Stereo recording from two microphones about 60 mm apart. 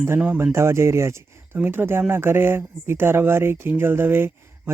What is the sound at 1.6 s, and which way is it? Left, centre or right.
Speech, right.